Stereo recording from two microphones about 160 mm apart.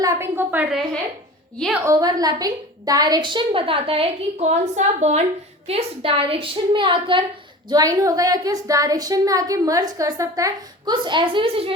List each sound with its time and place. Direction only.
0.0 s a woman's voice: 20° right (ahead or behind)
1.8 s a woman's voice: 20° right (ahead or behind)
7.7 s a woman's voice: 20° right (ahead or behind)